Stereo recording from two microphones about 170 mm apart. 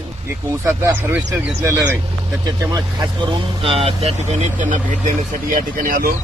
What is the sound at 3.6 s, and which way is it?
Speech, 35° right (ahead or behind).